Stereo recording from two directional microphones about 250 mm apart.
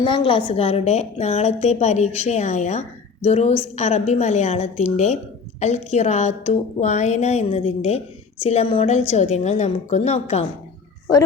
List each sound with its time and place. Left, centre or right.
0.0 s a woman's voice: centre